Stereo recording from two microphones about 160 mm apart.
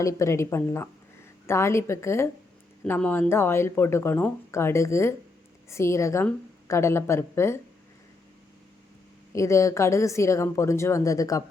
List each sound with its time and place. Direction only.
0.0 s speech: 20° left (ahead or behind)
9.3 s a woman's voice: 20° left (ahead or behind)